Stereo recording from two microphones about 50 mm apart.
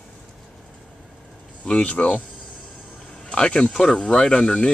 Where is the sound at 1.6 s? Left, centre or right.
Left.